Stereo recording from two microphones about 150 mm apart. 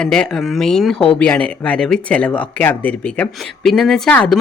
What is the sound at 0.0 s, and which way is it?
Speech, 5° left (ahead or behind).